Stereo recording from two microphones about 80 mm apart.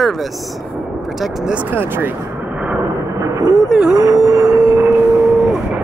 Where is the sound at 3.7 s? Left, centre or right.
Centre.